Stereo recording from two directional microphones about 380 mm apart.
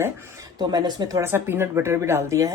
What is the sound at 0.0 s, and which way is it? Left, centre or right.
Speech, centre.